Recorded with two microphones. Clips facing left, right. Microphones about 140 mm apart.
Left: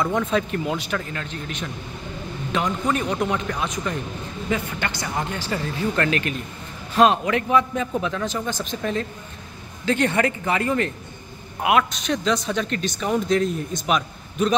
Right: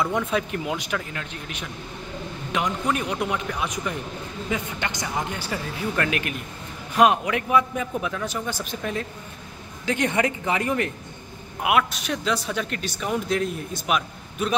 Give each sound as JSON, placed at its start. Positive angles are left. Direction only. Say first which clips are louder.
{"t": 0.0, "sound": "a man's voice", "louder": "left 2 dB", "side_deg": -10}